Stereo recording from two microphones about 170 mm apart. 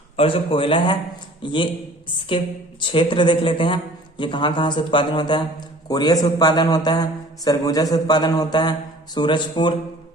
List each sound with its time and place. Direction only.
0.2 s a man's voice: 30° left (ahead or behind)
2.8 s a man's voice: 30° left (ahead or behind)